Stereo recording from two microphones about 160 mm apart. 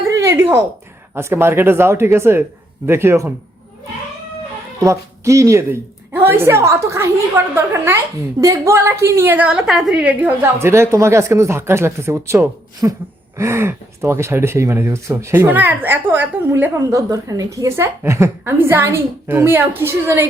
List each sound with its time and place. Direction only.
0.2 s a sound: 15° right (ahead or behind)
1.1 s speech: 15° right (ahead or behind)
4.8 s a woman's voice: 20° right (ahead or behind)